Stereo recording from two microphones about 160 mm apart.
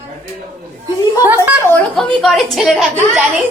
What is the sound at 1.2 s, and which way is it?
Speech, 10° right (ahead or behind).